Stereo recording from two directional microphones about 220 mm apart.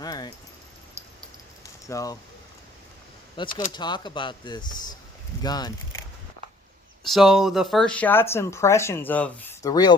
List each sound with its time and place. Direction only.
0.0 s keys jangling: 20° left (ahead or behind)
1.9 s speech: 15° left (ahead or behind)
3.3 s speech: 20° left (ahead or behind)
7.0 s speech: centre (ahead or behind); by 9.9 s 15° left (ahead or behind)